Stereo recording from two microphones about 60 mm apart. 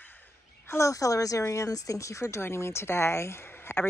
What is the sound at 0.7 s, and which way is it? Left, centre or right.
Speech, left.